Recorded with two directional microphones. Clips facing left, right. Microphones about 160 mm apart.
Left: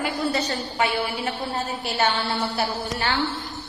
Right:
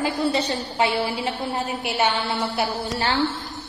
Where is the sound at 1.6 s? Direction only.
10° right (ahead or behind).